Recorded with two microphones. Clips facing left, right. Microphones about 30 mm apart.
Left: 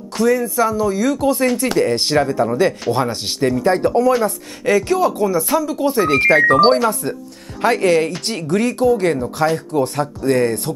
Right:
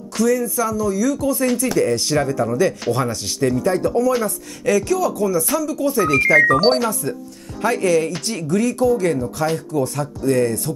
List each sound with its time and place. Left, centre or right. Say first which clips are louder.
0.2 s speech: left 3 dB; left
3.6 s speech: left 5 dB; left
4.2 s speech: left 4 dB; left
5.2 s speech: left 2 dB; left